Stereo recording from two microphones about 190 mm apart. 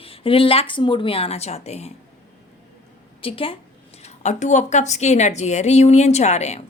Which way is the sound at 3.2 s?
30° left (ahead or behind).